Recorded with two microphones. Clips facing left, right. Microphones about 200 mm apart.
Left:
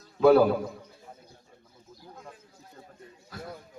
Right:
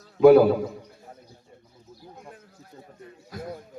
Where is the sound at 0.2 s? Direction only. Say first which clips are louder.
Right 5 dB; 10° right (ahead or behind).